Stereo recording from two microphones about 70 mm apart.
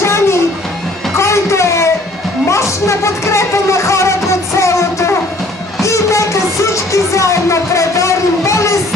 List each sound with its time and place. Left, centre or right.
0.0 s music: left